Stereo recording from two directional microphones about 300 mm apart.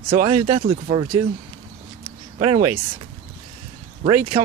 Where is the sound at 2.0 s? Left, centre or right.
Right.